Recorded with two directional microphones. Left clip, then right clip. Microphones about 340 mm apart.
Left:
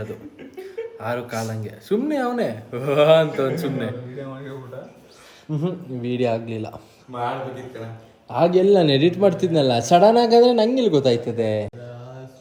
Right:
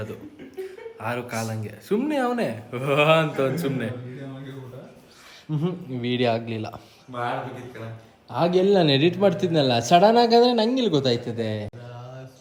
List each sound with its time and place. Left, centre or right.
0.0 s a man's voice: centre
5.5 s speech: right
6.0 s a man's voice: centre
8.3 s a man's voice: centre